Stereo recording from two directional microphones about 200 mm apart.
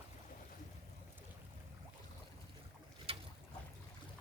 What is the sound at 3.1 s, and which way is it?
Boat, 30° right (ahead or behind).